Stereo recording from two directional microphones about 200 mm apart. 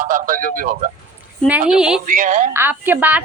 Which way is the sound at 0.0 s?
40° right (ahead or behind).